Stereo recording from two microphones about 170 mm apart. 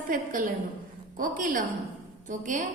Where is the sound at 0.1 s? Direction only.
50° right (ahead or behind).